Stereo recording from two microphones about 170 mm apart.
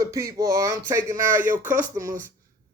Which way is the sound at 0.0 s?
20° right (ahead or behind).